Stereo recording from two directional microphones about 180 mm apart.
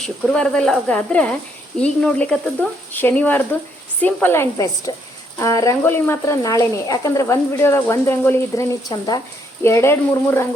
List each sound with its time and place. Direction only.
0.0 s speech: 5° left (ahead or behind)